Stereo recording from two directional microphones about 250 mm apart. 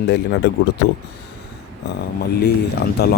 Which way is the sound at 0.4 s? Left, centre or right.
Left.